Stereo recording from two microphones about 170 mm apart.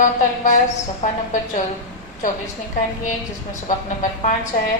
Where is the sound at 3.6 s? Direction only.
50° left (ahead or behind).